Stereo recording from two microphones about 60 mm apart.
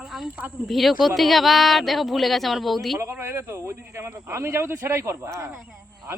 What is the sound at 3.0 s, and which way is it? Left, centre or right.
Speech, right.